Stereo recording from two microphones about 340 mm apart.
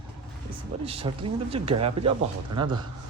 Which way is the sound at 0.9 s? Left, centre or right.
Centre.